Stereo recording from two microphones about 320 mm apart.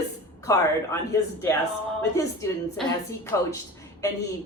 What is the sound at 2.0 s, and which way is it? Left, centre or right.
A woman's voice, centre.